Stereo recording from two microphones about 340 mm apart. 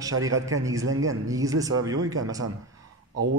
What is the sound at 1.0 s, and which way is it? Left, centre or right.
Speech, centre.